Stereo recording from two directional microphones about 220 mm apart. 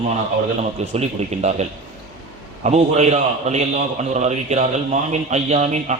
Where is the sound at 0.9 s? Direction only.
30° right (ahead or behind).